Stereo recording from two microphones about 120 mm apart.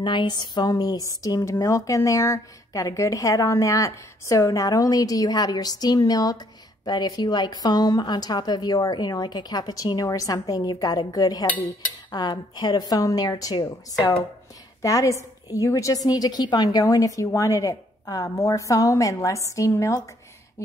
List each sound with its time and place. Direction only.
0.0 s a woman's voice: 40° left (ahead or behind)
11.4 s cutlery: 15° left (ahead or behind)
12.1 s a woman's voice: 35° left (ahead or behind)